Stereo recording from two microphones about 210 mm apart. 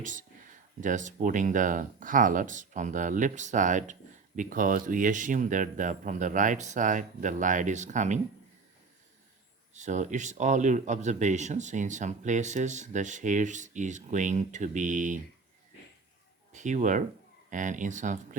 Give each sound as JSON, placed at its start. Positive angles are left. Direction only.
{"t": 0.0, "sound": "speech", "side_deg": -40}
{"t": 9.7, "sound": "speech", "side_deg": -35}
{"t": 16.5, "sound": "speech", "side_deg": -35}